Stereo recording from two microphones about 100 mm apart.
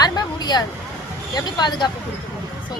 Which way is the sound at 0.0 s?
45° left (ahead or behind).